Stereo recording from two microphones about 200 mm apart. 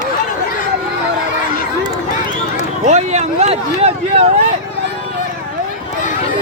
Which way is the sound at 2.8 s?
35° right (ahead or behind).